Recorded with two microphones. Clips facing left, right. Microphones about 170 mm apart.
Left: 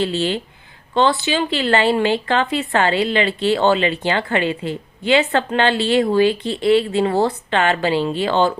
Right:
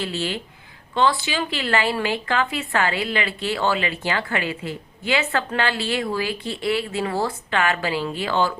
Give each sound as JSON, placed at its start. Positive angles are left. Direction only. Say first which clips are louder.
{"t": 0.0, "sound": "a woman's voice", "louder": "left 7 dB", "side_deg": 30}